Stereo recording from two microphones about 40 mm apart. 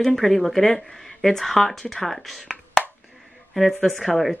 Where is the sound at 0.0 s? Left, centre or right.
Centre.